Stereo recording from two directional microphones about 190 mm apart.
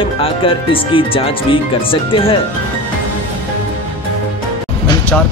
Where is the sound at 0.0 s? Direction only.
30° left (ahead or behind).